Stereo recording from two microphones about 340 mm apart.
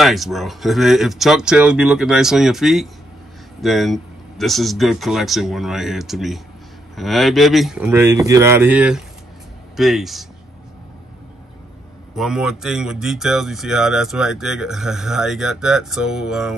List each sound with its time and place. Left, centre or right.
0.0 s speech: centre
12.2 s speech: centre